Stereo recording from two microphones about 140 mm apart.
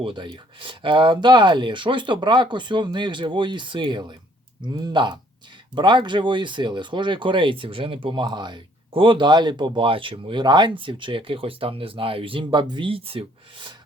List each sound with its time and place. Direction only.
0.0 s speech: 35° right (ahead or behind)